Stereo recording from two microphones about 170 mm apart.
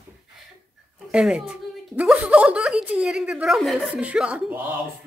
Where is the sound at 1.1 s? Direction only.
5° right (ahead or behind).